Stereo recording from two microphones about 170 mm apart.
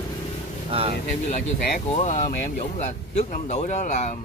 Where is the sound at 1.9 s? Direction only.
45° left (ahead or behind).